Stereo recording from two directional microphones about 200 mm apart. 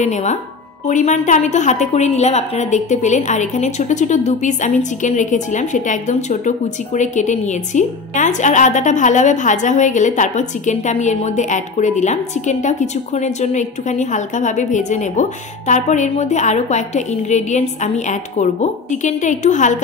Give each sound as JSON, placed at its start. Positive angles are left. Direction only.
{"t": 0.0, "sound": "a woman's voice", "side_deg": 35}